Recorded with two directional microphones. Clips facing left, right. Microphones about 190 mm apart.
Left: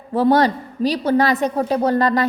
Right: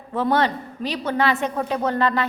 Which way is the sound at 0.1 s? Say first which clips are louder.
Left 5 dB; 35° left (ahead or behind).